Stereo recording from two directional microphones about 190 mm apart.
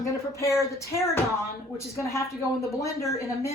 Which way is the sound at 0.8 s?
15° left (ahead or behind).